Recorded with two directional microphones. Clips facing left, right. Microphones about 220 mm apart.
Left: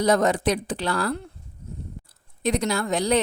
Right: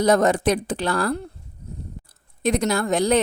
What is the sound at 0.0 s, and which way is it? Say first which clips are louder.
Speech: right 3 dB; 50° right (ahead or behind).